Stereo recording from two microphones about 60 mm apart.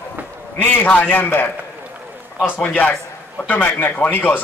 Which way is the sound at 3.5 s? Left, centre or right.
Left.